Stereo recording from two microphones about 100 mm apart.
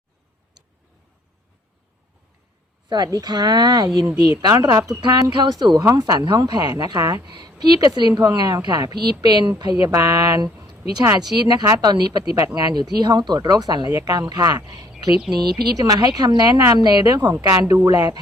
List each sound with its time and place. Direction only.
2.9 s speech: 40° right (ahead or behind)
9.8 s speech: 30° right (ahead or behind)